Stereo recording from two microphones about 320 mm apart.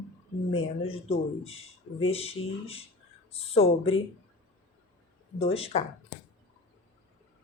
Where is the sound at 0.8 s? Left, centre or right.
Centre.